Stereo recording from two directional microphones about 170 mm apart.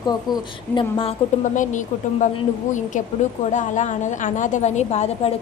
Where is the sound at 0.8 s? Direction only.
30° left (ahead or behind).